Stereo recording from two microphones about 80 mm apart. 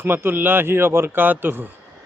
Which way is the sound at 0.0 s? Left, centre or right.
Right.